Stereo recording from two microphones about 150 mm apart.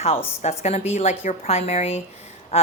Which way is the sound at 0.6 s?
45° left (ahead or behind).